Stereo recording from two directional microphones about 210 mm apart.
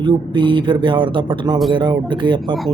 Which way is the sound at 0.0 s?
20° right (ahead or behind).